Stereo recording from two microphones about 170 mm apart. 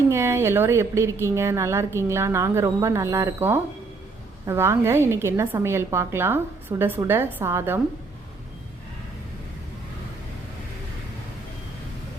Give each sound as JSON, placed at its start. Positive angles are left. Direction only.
{"t": 0.1, "sound": "a woman's voice", "side_deg": -15}